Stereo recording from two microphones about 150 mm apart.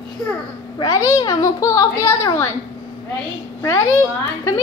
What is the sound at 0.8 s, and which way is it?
A child's voice, 25° left (ahead or behind).